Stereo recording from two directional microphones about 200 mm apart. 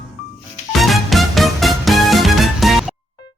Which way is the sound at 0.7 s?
Centre (ahead or behind).